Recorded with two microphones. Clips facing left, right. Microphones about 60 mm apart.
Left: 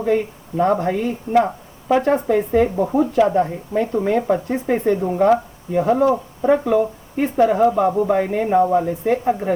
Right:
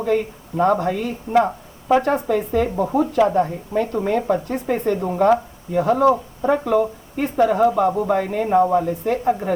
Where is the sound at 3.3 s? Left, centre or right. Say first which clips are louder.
Left 1 dB; left.